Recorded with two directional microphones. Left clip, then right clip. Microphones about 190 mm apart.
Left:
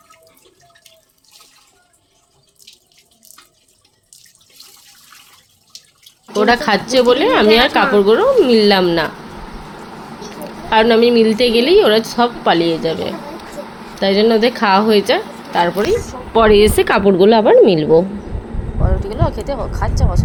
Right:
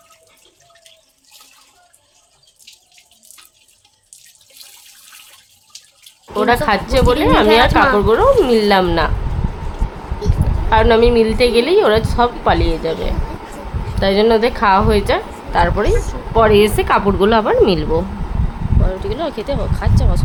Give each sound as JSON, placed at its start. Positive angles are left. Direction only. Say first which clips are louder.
{"t": 6.3, "sound": "a woman's voice", "louder": "left 1 dB", "side_deg": 15}
{"t": 10.7, "sound": "a woman's voice", "louder": "left 1 dB", "side_deg": 5}
{"t": 16.0, "sound": "a woman's voice", "louder": "left 1 dB", "side_deg": 15}
{"t": 17.1, "sound": "a woman's voice", "louder": "left 4 dB", "side_deg": 5}
{"t": 19.5, "sound": "speech", "louder": "even", "side_deg": -15}